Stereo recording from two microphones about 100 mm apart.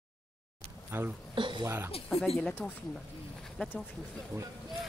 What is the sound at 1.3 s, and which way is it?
Speech, 55° right (ahead or behind).